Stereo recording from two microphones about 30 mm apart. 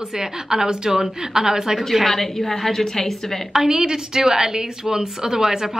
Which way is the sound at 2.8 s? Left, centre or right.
Centre.